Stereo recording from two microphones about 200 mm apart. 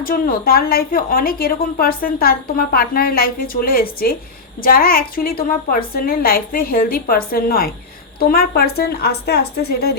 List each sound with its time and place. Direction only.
0.0 s a woman's voice: 45° left (ahead or behind)